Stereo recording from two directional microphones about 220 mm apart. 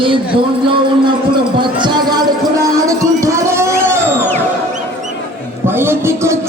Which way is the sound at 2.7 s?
15° right (ahead or behind).